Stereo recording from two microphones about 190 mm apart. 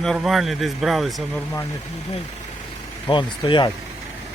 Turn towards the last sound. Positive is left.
turn(degrees=25)  # may be behind; listen again after turning